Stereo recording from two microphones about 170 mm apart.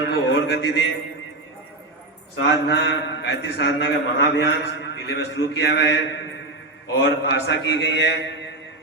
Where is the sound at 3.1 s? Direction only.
90° left.